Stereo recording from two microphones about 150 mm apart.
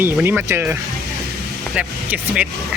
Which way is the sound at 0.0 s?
10° right (ahead or behind).